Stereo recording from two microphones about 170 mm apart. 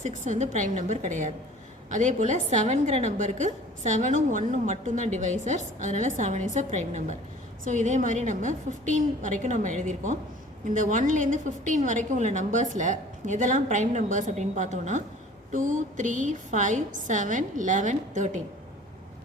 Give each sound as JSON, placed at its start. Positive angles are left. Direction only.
{"t": 0.0, "sound": "a woman's voice", "side_deg": -45}